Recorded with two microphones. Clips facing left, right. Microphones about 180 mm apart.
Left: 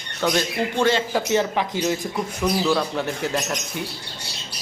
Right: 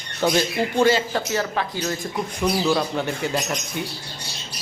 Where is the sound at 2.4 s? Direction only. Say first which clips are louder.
Even; centre (ahead or behind).